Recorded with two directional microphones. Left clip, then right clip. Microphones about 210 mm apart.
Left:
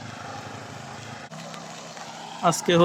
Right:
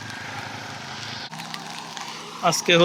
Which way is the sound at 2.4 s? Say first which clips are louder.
Right 2 dB; 20° left (ahead or behind).